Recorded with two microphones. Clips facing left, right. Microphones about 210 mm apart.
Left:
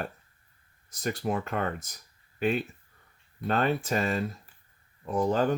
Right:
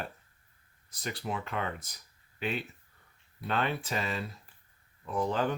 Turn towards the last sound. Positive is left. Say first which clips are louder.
# left 5 dB
turn(degrees=45)  # may be behind; listen again after turning